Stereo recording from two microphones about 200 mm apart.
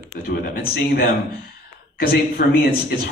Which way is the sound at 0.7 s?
45° left (ahead or behind).